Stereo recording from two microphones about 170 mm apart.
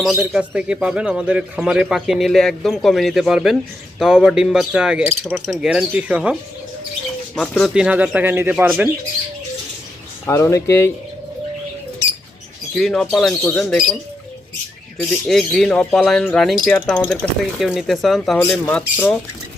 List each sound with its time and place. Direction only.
0.0 s speech: 5° right (ahead or behind)
7.6 s speech: 5° right (ahead or behind)
10.2 s speech: 15° left (ahead or behind)
12.7 s speech: 5° left (ahead or behind)
14.9 s speech: centre (ahead or behind)